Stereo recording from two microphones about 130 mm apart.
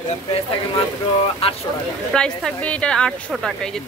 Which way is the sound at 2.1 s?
5° left (ahead or behind).